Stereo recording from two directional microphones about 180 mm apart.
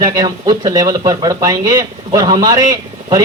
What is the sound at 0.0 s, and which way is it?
Speech, 20° right (ahead or behind).